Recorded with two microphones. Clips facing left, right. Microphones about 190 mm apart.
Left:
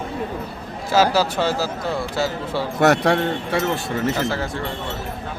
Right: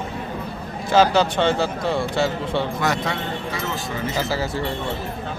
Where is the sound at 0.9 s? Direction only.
5° left (ahead or behind).